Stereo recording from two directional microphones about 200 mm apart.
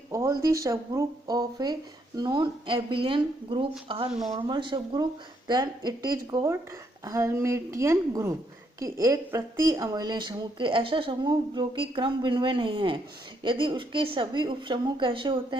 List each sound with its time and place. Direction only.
0.1 s a woman's voice: 15° right (ahead or behind)